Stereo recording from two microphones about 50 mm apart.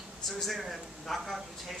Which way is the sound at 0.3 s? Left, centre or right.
Centre.